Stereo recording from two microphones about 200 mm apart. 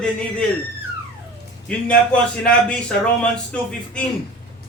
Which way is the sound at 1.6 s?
5° left (ahead or behind).